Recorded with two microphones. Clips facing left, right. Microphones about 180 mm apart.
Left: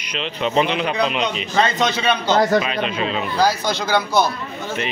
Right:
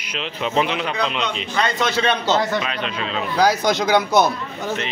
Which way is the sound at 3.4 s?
15° right (ahead or behind).